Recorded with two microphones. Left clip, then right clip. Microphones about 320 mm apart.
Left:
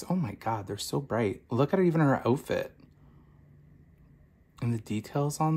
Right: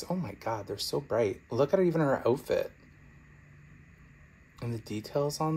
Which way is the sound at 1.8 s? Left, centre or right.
Left.